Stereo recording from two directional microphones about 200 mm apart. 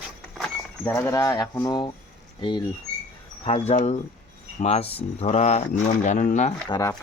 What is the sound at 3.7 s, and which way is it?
Speech, 35° left (ahead or behind).